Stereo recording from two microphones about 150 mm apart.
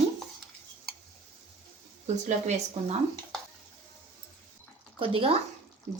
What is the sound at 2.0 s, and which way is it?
Speech, 50° right (ahead or behind).